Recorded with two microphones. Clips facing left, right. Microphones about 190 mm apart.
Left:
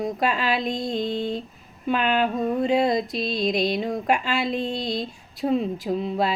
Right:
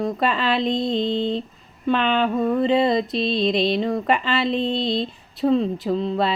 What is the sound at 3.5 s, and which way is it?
Speech, centre (ahead or behind).